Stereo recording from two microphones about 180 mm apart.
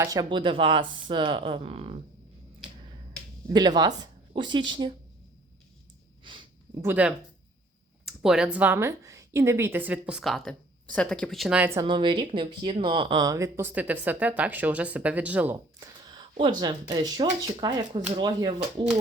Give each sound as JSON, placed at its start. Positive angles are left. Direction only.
{"t": 0.0, "sound": "speech", "side_deg": -20}
{"t": 3.5, "sound": "speech", "side_deg": -25}
{"t": 6.2, "sound": "a sound", "side_deg": -25}
{"t": 6.8, "sound": "speech", "side_deg": -10}
{"t": 11.9, "sound": "speech", "side_deg": -25}
{"t": 15.8, "sound": "speech", "side_deg": -25}